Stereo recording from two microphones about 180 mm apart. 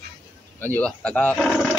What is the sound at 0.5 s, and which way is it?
Speech, 10° left (ahead or behind).